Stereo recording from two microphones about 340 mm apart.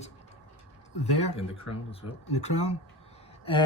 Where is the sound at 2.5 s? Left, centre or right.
Left.